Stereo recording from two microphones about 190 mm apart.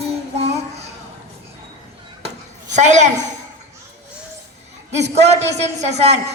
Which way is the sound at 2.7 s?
40° right (ahead or behind).